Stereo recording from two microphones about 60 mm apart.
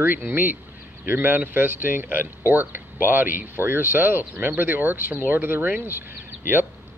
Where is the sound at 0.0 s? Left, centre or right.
Right.